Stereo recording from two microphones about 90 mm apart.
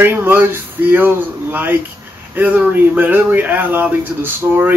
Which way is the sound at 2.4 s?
20° right (ahead or behind).